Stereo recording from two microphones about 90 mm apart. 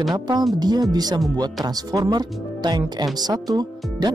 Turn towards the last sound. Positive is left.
turn(degrees=-50)  # may be behind; listen again after turning